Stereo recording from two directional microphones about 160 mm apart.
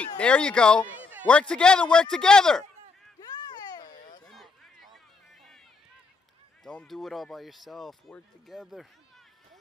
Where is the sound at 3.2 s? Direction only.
25° left (ahead or behind).